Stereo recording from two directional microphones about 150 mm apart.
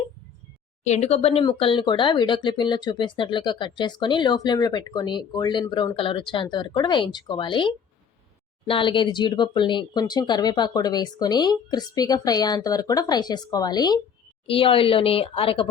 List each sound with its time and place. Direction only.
0.9 s speech: 45° left (ahead or behind); by 14.0 s 25° left (ahead or behind)
14.4 s speech: 35° left (ahead or behind)